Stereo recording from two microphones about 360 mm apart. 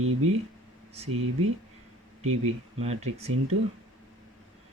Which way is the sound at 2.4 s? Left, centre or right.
Centre.